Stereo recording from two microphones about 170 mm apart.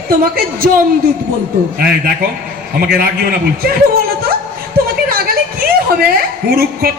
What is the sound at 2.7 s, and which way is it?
Speech, 65° right (ahead or behind).